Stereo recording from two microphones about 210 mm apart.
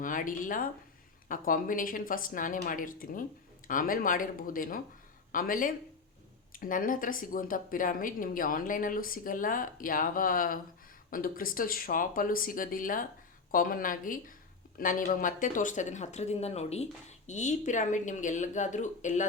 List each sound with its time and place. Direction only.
0.0 s speech: 40° left (ahead or behind)